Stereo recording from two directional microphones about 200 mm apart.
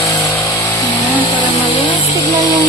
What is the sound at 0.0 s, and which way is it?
Vehicle, 15° left (ahead or behind).